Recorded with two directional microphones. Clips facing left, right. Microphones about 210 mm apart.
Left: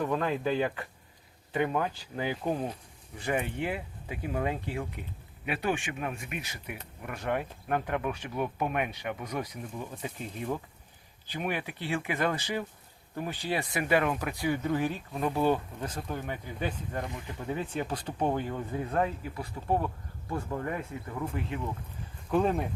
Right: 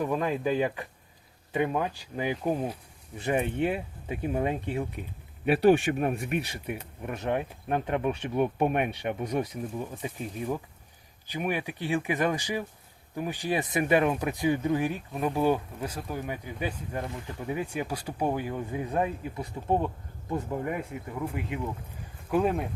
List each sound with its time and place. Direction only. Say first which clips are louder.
0.0 s speech: right 1 dB; 15° right (ahead or behind)
3.2 s speech: right 4 dB; 25° right (ahead or behind)
5.5 s speech: right 10 dB; 35° right (ahead or behind); by 22.7 s 5° right (ahead or behind)